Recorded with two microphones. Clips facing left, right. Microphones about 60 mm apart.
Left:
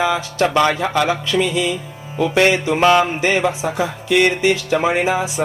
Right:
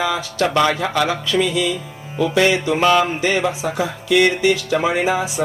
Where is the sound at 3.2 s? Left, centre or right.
Left.